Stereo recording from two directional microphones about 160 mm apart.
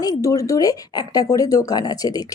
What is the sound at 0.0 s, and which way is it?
Speech, 20° left (ahead or behind).